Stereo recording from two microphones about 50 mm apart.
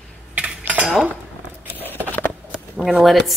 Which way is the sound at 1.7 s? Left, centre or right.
Left.